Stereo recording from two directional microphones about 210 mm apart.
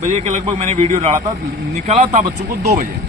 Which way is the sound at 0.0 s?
35° right (ahead or behind).